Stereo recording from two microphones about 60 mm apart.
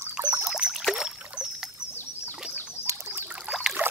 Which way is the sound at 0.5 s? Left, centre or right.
Centre.